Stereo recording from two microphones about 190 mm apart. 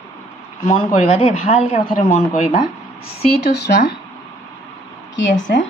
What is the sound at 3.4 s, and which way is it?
Speech, 60° left (ahead or behind).